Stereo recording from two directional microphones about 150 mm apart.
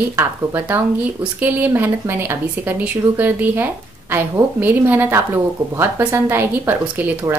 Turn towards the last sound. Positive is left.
turn(degrees=-15)  # may be behind; listen again after turning